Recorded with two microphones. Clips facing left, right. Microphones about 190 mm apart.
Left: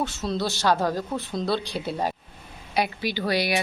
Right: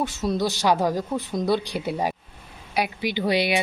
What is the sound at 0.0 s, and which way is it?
Speech, 15° right (ahead or behind).